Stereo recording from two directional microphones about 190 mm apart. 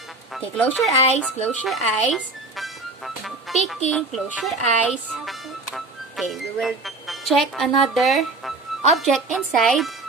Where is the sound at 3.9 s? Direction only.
Centre (ahead or behind).